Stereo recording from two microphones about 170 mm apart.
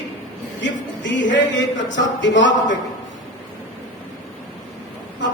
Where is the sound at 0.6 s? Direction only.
90° left.